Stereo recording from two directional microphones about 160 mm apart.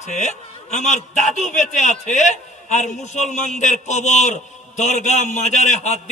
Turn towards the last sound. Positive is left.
turn(degrees=45)  # may be behind; listen again after turning